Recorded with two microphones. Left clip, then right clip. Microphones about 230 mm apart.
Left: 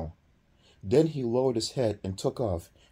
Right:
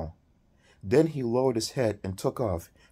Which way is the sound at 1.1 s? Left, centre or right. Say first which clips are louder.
Right 1 dB; right.